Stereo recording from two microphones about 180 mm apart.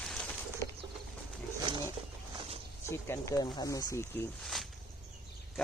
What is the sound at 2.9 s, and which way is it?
Speech, 15° left (ahead or behind).